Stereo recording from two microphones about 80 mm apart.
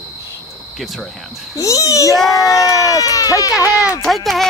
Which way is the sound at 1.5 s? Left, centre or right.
Left.